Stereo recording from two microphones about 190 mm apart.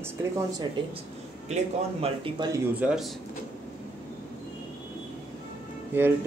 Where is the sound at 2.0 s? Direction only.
25° right (ahead or behind).